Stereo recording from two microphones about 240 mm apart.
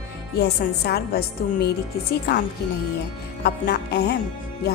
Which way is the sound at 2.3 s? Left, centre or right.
Left.